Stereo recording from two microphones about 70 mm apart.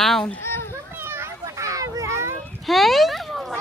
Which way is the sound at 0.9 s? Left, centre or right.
Right.